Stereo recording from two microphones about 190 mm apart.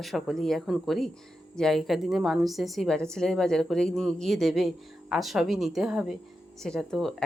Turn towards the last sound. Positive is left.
turn(degrees=0)  # may be behind; listen again after turning